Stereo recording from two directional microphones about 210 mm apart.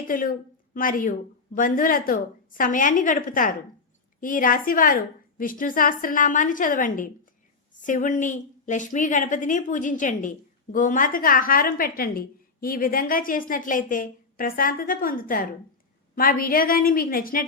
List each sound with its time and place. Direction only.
0.1 s a woman's voice: 40° left (ahead or behind)